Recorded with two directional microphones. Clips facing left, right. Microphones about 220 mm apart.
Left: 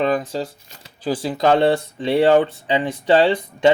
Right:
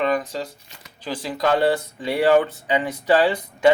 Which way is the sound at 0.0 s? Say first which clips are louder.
Left 2 dB; 30° left (ahead or behind).